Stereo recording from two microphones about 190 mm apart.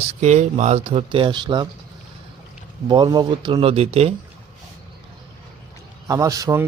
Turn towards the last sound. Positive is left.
turn(degrees=-15)  # may be behind; listen again after turning